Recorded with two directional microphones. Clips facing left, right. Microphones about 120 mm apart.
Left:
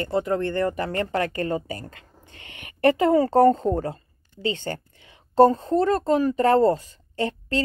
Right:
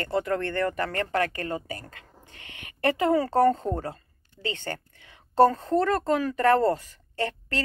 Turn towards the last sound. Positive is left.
turn(degrees=20)  # may be behind; listen again after turning